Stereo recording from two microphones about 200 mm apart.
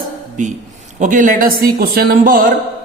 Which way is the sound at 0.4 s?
40° right (ahead or behind).